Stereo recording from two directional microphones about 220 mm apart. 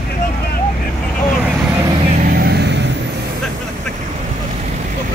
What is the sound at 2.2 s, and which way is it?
Vehicle, 45° right (ahead or behind).